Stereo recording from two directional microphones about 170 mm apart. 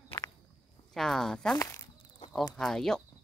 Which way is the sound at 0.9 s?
Centre (ahead or behind).